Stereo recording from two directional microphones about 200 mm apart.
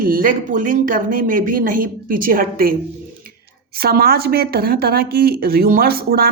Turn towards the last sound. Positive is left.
turn(degrees=-50)  # may be behind; listen again after turning